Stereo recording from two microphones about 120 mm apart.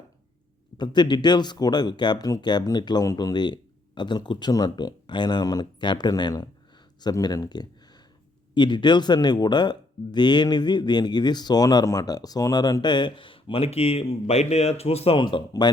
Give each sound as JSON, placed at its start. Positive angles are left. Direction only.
{"t": 0.8, "sound": "speech", "side_deg": 40}